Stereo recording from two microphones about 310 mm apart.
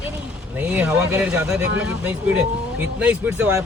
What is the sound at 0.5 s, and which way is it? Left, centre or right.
A woman's voice, centre.